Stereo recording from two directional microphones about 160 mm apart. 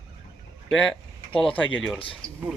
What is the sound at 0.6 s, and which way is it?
Speech, 5° left (ahead or behind).